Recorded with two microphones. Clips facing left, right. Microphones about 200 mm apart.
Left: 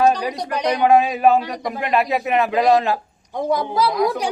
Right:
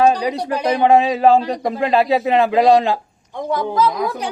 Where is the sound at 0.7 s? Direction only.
25° right (ahead or behind).